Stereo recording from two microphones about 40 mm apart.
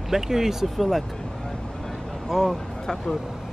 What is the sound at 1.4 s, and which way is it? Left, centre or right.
Vehicle, centre.